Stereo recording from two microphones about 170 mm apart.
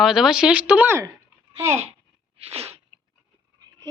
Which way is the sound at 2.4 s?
35° right (ahead or behind).